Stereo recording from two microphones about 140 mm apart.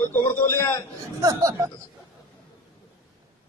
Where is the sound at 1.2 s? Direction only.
25° right (ahead or behind).